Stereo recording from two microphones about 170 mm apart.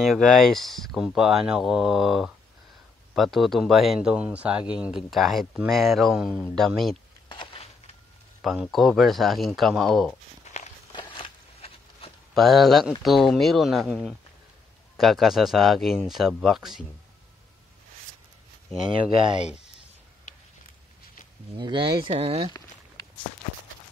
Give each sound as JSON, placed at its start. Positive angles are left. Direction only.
{"t": 0.0, "sound": "speech", "side_deg": 0}
{"t": 7.2, "sound": "a sound", "side_deg": 30}
{"t": 8.4, "sound": "speech", "side_deg": 0}
{"t": 10.4, "sound": "walk", "side_deg": 40}
{"t": 10.9, "sound": "a sound", "side_deg": 30}
{"t": 12.4, "sound": "speech", "side_deg": 0}
{"t": 19.0, "sound": "speech", "side_deg": -30}
{"t": 20.3, "sound": "a sound", "side_deg": 45}
{"t": 21.5, "sound": "speech", "side_deg": -25}